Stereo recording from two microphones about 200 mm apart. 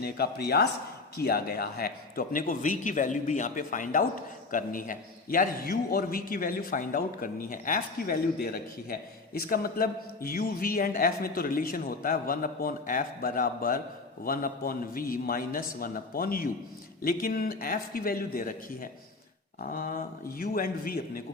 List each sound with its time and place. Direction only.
0.0 s speech: 55° left (ahead or behind)